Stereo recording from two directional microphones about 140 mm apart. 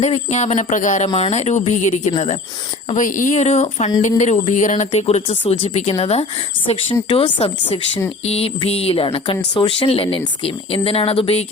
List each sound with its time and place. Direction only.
0.0 s speech: 55° left (ahead or behind)
2.9 s speech: 70° left (ahead or behind); by 11.4 s 45° left (ahead or behind)